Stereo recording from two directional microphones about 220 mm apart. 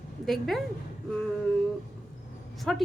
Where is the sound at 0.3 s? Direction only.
Centre (ahead or behind).